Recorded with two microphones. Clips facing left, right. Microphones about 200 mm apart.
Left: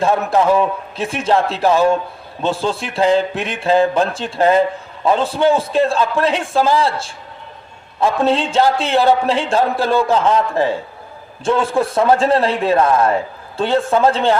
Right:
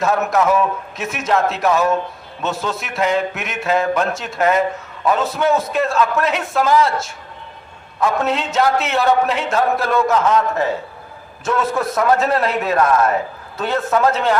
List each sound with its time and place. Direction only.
0.0 s a man's voice: 30° left (ahead or behind)